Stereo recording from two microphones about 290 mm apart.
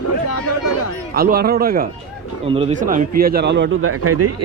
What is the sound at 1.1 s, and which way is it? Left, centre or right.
A man's voice, right.